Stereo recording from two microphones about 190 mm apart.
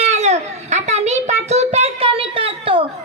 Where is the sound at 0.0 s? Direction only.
35° right (ahead or behind).